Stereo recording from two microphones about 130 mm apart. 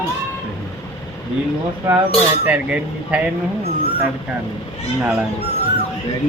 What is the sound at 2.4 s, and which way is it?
Speech, 10° right (ahead or behind).